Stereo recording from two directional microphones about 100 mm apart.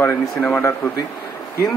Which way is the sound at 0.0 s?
15° left (ahead or behind).